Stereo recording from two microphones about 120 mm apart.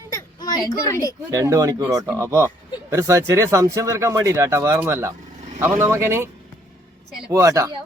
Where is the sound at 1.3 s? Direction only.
25° right (ahead or behind).